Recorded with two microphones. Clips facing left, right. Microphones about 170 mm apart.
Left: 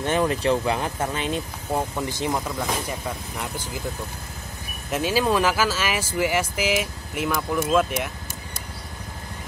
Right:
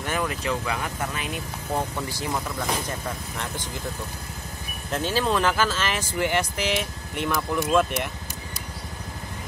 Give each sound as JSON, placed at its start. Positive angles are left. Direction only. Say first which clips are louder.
{"t": 0.0, "sound": "speech", "louder": "left 6 dB", "side_deg": 30}
{"t": 1.7, "sound": "speech", "louder": "left 2 dB", "side_deg": 10}
{"t": 2.0, "sound": "speech", "louder": "left 3 dB", "side_deg": 20}
{"t": 2.7, "sound": "speech", "louder": "left 1 dB", "side_deg": 10}
{"t": 4.9, "sound": "speech", "louder": "left 3 dB", "side_deg": 10}